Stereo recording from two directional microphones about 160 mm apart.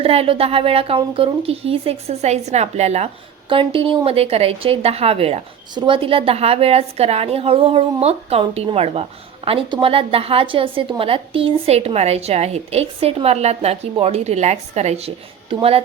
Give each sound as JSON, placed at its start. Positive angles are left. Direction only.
{"t": 0.0, "sound": "a woman's voice", "side_deg": -35}